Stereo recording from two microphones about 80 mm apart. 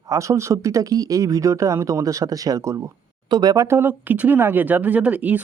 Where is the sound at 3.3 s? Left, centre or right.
Right.